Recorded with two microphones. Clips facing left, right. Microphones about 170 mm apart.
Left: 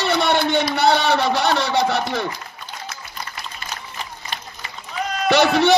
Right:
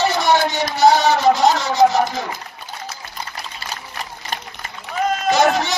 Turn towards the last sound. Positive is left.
turn(degrees=65)  # may be behind; listen again after turning